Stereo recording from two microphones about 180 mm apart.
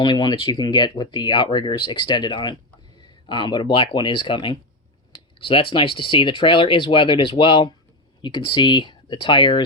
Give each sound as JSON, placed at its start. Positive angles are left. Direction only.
{"t": 0.0, "sound": "speech", "side_deg": 25}